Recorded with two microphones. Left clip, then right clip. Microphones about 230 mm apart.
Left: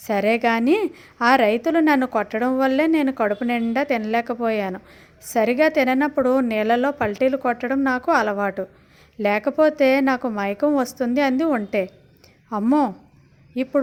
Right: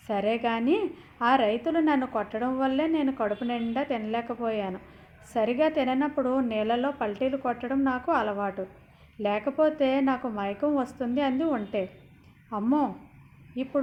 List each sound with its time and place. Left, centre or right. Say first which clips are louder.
0.1 s a woman's voice: left 8 dB; left